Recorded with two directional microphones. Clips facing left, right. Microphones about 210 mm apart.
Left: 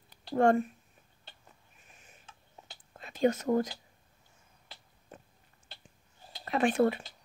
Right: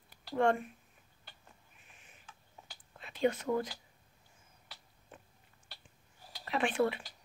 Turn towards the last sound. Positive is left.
turn(degrees=40)  # may be behind; listen again after turning